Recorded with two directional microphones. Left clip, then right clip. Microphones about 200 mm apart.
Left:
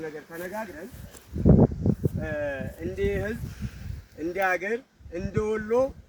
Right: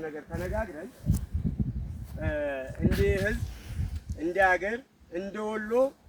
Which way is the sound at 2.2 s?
35° left (ahead or behind).